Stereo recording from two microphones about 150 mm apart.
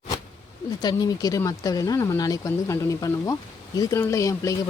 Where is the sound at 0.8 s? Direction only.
25° left (ahead or behind).